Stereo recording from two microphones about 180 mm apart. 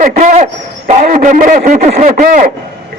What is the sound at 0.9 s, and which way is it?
A man's voice, 45° right (ahead or behind).